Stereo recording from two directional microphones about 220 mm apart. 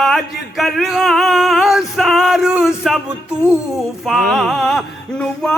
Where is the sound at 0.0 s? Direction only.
Centre (ahead or behind).